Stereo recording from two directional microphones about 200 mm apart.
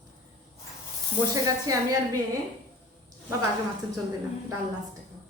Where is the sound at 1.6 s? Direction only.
20° right (ahead or behind).